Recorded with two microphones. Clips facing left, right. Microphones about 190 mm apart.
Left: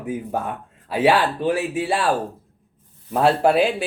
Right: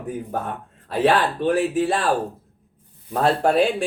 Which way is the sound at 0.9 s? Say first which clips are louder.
Left 1 dB; 10° left (ahead or behind).